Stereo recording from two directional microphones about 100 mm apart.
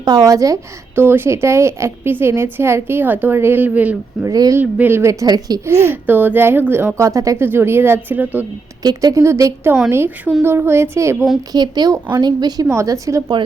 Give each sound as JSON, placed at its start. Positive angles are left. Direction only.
{"t": 0.0, "sound": "speech", "side_deg": -40}
{"t": 0.9, "sound": "a woman's voice", "side_deg": -20}
{"t": 4.3, "sound": "speech", "side_deg": -35}
{"t": 4.6, "sound": "a woman's voice", "side_deg": -20}
{"t": 5.2, "sound": "speech", "side_deg": -40}
{"t": 5.6, "sound": "a woman's voice", "side_deg": -25}
{"t": 8.8, "sound": "a woman's voice", "side_deg": -40}
{"t": 11.5, "sound": "speech", "side_deg": -45}
{"t": 12.6, "sound": "speech", "side_deg": -30}